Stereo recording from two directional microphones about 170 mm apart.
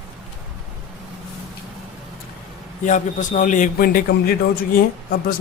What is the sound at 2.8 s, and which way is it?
A man's voice, 50° left (ahead or behind).